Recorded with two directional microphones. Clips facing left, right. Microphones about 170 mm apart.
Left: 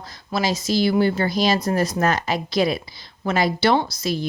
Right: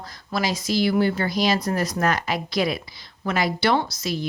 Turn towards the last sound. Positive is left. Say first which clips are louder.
# left 3 dB
turn(degrees=30)  # may be behind; listen again after turning